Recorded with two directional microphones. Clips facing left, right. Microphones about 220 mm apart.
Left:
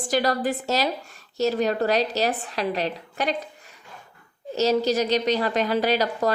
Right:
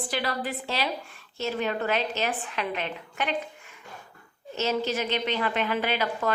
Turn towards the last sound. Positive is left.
turn(degrees=40)  # may be behind; listen again after turning